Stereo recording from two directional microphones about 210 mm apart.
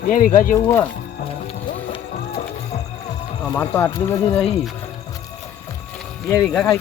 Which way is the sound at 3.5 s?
10° left (ahead or behind).